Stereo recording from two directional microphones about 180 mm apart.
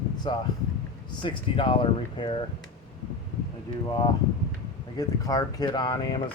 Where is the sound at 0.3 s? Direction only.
25° left (ahead or behind).